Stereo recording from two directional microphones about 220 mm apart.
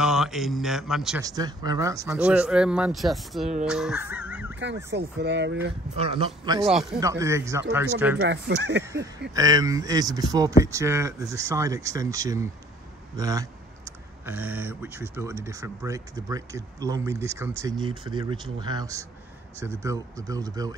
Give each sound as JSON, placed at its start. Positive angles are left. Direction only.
{"t": 0.0, "sound": "a man's voice", "side_deg": 0}
{"t": 1.2, "sound": "a man's voice", "side_deg": -15}
{"t": 4.9, "sound": "speech", "side_deg": -50}
{"t": 5.9, "sound": "speech", "side_deg": -25}
{"t": 6.7, "sound": "a man's voice", "side_deg": 0}
{"t": 7.0, "sound": "speech", "side_deg": -15}
{"t": 8.2, "sound": "speech", "side_deg": -55}
{"t": 9.3, "sound": "speech", "side_deg": -15}